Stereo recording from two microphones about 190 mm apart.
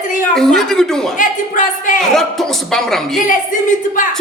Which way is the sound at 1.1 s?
45° left (ahead or behind).